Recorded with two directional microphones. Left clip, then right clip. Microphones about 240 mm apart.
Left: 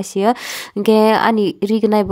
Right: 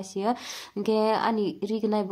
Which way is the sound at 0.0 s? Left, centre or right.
Left.